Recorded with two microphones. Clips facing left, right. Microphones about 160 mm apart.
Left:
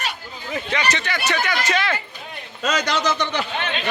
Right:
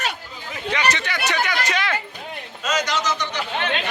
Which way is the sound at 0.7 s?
10° right (ahead or behind).